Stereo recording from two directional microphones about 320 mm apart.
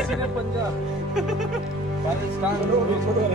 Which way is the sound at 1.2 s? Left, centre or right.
Centre.